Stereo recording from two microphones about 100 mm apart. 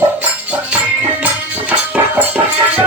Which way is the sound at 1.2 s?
15° right (ahead or behind).